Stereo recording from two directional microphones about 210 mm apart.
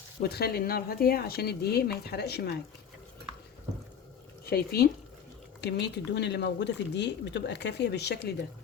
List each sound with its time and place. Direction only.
0.2 s speech: 50° left (ahead or behind)
4.4 s speech: 50° left (ahead or behind)